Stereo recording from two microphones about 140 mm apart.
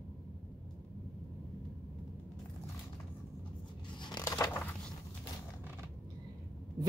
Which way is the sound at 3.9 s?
30° left (ahead or behind).